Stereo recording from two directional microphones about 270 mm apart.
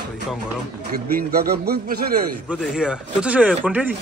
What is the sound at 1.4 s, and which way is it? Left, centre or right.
Speech, right.